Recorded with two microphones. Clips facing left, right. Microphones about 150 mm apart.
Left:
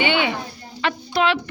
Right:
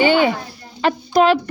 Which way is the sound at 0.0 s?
40° right (ahead or behind).